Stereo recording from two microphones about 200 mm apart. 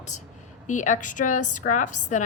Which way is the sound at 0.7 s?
40° left (ahead or behind).